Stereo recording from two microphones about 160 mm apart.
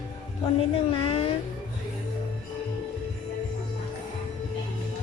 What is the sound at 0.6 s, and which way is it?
Speech, 35° left (ahead or behind).